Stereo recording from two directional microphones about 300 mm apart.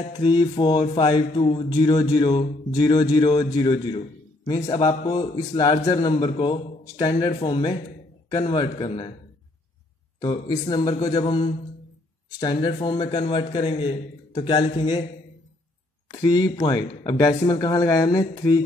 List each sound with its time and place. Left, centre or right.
0.1 s speech: centre
10.2 s speech: centre
16.1 s speech: centre